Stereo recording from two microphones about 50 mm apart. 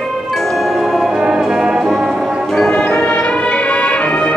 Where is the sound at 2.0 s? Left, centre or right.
Centre.